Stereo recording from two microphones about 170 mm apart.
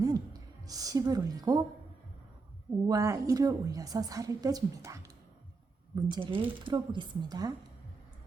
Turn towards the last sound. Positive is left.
turn(degrees=-20)  # may be behind; listen again after turning